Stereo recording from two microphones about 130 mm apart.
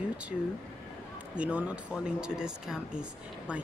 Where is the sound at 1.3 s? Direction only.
10° right (ahead or behind).